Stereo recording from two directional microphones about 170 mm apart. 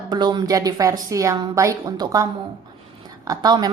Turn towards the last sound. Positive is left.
turn(degrees=-25)  # may be behind; listen again after turning